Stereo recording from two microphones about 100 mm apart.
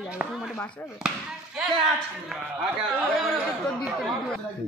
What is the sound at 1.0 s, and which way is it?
Speech, 5° right (ahead or behind).